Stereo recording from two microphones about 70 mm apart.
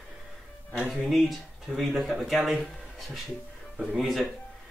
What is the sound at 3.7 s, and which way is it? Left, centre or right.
Speech, centre.